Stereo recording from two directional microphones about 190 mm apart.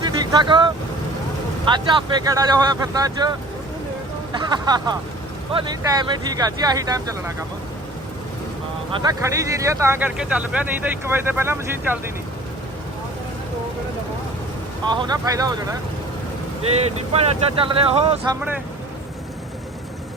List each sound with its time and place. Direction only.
0.0 s vehicle: 20° right (ahead or behind)
1.7 s speech: 25° right (ahead or behind)
9.0 s speech: 15° right (ahead or behind)
14.8 s speech: 20° right (ahead or behind)
16.7 s speech: 35° right (ahead or behind)